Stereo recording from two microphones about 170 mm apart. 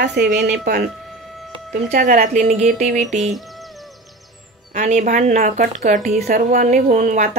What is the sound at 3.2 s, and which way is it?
Music, centre (ahead or behind).